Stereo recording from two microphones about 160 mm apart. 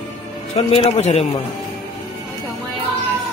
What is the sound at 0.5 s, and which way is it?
Speech, 40° left (ahead or behind).